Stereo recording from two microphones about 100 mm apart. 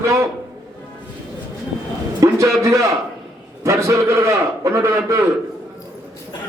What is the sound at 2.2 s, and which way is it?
A man's voice, 30° right (ahead or behind).